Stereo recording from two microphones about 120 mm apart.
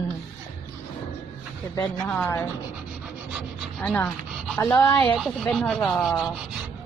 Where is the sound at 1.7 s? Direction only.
20° left (ahead or behind).